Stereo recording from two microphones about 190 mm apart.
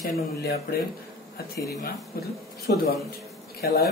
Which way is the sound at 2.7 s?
60° left (ahead or behind).